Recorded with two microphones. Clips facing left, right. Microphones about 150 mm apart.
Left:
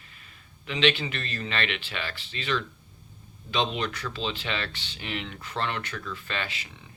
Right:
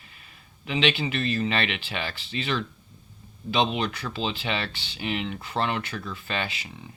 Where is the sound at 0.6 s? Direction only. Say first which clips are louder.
Even; 15° right (ahead or behind).